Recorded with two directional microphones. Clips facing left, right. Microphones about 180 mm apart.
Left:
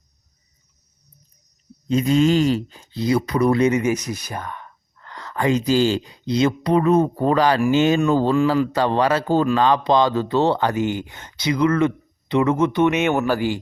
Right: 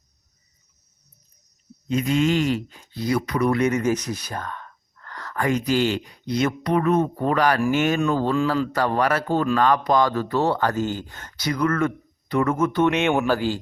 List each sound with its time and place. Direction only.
1.9 s speech: 30° left (ahead or behind)
12.8 s speech: 5° left (ahead or behind)